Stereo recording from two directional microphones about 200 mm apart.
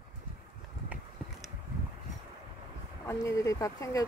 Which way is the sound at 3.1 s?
15° left (ahead or behind).